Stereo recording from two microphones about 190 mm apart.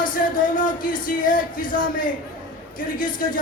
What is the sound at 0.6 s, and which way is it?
Speech, 45° left (ahead or behind).